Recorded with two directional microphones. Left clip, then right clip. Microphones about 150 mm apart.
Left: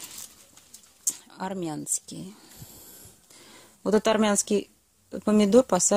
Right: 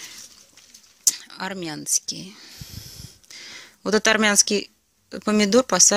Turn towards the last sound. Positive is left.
turn(degrees=5)  # may be behind; listen again after turning